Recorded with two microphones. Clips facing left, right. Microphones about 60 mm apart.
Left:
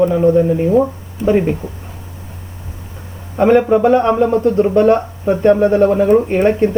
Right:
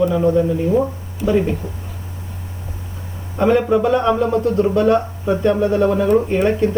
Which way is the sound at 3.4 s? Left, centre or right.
Left.